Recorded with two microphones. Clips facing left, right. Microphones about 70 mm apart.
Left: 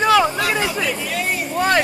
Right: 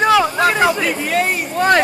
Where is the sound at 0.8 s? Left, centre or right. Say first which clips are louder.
Right 5 dB; right.